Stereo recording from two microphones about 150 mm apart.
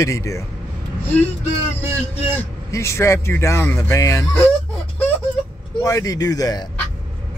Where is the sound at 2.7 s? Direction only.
20° left (ahead or behind).